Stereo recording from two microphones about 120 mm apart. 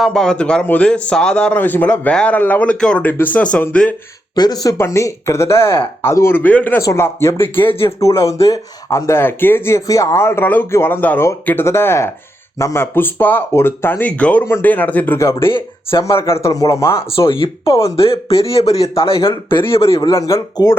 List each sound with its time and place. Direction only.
0.0 s speech: 5° left (ahead or behind)
4.4 s speech: 35° left (ahead or behind)
15.5 s speech: 45° left (ahead or behind)
16.0 s speech: 25° left (ahead or behind)
17.2 s speech: 45° left (ahead or behind)
20.1 s speech: 30° left (ahead or behind)